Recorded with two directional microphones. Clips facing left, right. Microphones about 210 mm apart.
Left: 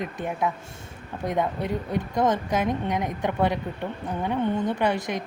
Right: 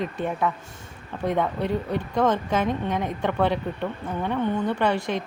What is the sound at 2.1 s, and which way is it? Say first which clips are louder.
A woman's voice: right 1 dB; 20° left (ahead or behind).